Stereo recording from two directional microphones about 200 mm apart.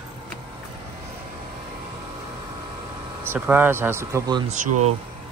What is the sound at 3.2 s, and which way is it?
Speech, 10° right (ahead or behind).